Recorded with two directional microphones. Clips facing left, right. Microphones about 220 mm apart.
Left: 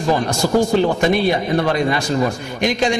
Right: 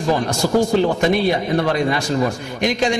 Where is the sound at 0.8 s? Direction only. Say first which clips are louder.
Left 1 dB; 40° right (ahead or behind).